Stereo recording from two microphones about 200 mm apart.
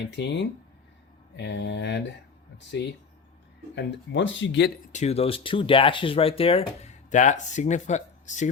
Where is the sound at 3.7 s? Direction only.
60° left (ahead or behind).